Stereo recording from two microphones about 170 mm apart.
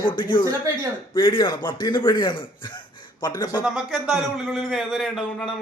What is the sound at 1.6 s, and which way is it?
A man's voice, 20° left (ahead or behind).